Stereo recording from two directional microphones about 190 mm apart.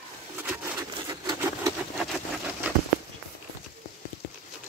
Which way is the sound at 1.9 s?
Centre (ahead or behind).